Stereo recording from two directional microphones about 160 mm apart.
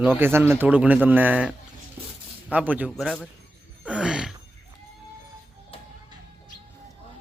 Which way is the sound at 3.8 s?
5° right (ahead or behind).